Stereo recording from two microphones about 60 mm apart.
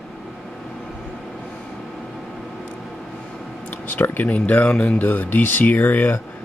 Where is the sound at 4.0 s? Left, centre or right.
Left.